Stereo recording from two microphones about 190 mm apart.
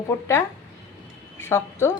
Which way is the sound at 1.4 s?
15° left (ahead or behind).